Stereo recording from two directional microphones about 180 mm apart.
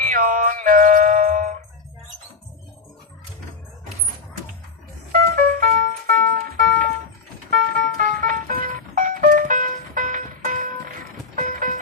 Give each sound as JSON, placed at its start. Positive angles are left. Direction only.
{"t": 0.0, "sound": "music", "side_deg": -50}
{"t": 5.1, "sound": "music", "side_deg": -50}